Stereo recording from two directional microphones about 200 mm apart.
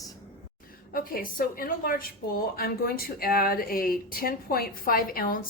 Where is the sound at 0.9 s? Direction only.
45° left (ahead or behind).